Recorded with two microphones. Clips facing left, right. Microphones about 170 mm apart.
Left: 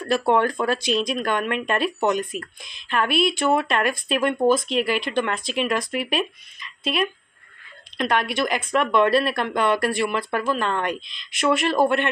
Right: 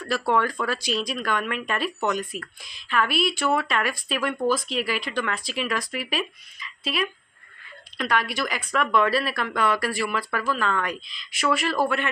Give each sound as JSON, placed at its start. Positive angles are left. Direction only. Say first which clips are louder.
{"t": 0.0, "sound": "speech", "louder": "left 4 dB", "side_deg": 20}
{"t": 8.0, "sound": "speech", "louder": "left 3 dB", "side_deg": 20}